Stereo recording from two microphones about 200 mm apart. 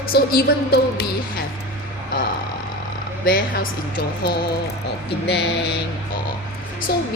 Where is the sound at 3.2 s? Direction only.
45° left (ahead or behind).